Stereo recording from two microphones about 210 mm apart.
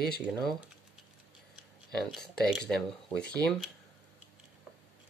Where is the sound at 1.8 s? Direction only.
Centre (ahead or behind).